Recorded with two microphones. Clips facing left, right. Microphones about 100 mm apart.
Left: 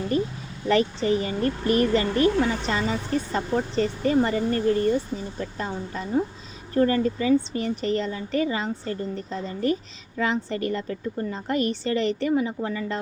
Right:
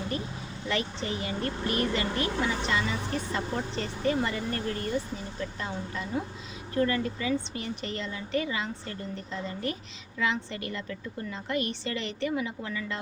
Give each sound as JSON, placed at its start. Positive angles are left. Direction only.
{"t": 1.0, "sound": "a woman's voice", "side_deg": 35}
{"t": 5.4, "sound": "a woman's voice", "side_deg": 40}